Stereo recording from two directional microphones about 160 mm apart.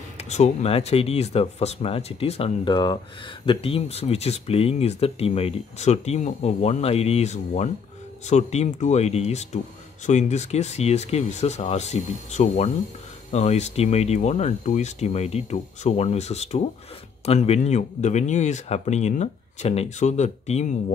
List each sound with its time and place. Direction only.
0.2 s speech: 45° left (ahead or behind)